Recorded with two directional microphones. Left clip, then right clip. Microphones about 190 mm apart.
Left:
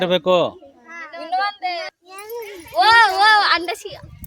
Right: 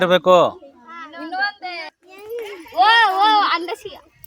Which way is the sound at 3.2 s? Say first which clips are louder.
Left 1 dB; 30° left (ahead or behind).